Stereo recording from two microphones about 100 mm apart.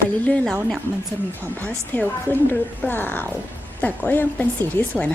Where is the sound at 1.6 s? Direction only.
15° left (ahead or behind).